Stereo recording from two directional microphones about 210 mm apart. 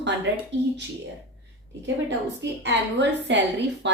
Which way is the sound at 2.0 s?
55° right (ahead or behind).